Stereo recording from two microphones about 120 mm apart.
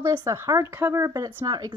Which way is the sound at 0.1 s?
30° right (ahead or behind).